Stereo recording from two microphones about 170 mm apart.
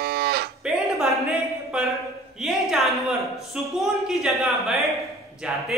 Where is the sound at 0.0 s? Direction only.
65° right (ahead or behind).